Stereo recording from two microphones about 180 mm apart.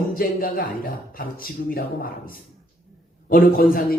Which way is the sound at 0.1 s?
55° left (ahead or behind).